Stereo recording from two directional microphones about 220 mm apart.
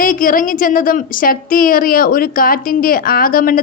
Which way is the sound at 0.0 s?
40° left (ahead or behind).